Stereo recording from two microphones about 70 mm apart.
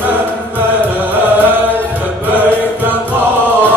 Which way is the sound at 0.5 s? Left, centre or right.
Right.